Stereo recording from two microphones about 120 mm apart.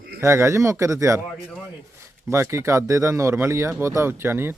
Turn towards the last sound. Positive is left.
turn(degrees=-20)  # may be behind; listen again after turning